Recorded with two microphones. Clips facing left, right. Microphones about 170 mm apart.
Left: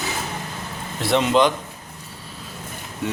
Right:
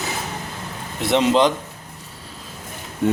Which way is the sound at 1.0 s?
20° right (ahead or behind).